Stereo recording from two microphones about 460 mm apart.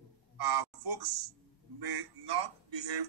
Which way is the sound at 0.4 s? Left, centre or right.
Right.